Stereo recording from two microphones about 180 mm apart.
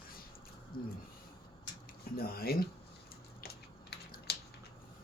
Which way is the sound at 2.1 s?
55° left (ahead or behind).